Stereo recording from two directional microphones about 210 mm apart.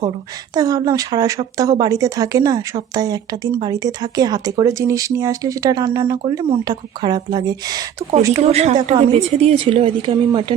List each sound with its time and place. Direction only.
0.5 s speech: 20° right (ahead or behind)
8.4 s a woman's voice: 30° right (ahead or behind)